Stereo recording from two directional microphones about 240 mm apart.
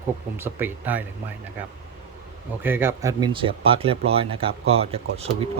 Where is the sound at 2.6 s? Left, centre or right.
Centre; by 5.2 s right.